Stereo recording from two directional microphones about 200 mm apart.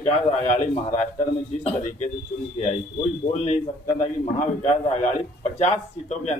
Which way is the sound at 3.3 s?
35° left (ahead or behind).